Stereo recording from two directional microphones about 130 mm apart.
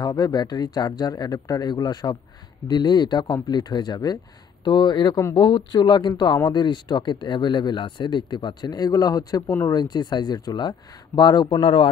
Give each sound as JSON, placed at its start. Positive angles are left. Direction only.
{"t": 0.0, "sound": "speech", "side_deg": 30}